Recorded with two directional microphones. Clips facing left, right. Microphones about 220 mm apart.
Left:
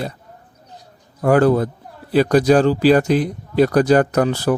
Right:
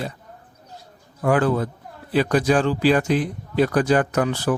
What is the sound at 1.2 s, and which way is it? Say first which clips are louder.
Speech: left 5 dB; 40° left (ahead or behind).